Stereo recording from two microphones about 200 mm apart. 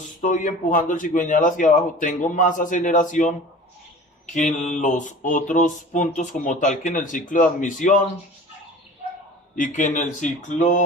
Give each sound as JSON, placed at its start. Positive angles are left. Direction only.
{"t": 0.2, "sound": "mantra", "side_deg": 40}
{"t": 4.4, "sound": "mantra", "side_deg": 40}
{"t": 9.6, "sound": "mantra", "side_deg": 40}